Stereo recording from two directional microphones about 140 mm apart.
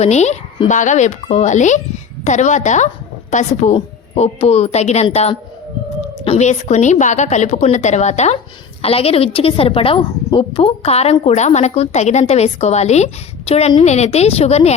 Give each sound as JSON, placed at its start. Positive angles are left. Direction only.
{"t": 0.0, "sound": "a woman's voice", "side_deg": 55}
{"t": 3.8, "sound": "a woman's voice", "side_deg": 45}
{"t": 6.4, "sound": "a woman's voice", "side_deg": 55}